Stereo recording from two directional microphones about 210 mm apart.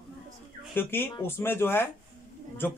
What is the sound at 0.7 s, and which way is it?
Speech, 10° left (ahead or behind).